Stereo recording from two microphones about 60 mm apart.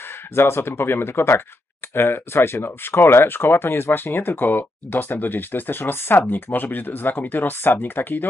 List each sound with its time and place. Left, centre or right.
0.3 s speech: left